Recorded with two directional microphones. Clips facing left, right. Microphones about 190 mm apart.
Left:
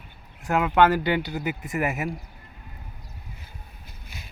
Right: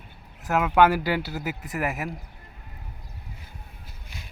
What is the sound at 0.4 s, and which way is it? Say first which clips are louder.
Speech: even; 5° right (ahead or behind).